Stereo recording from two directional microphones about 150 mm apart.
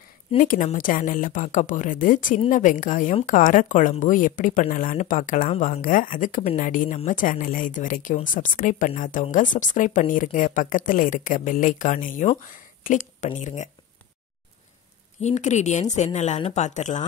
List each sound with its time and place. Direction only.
0.4 s speech: 60° left (ahead or behind)
15.1 s a woman's voice: 50° left (ahead or behind)